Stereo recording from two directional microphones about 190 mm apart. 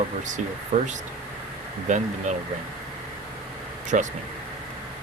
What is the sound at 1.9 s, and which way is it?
Speech, 40° right (ahead or behind).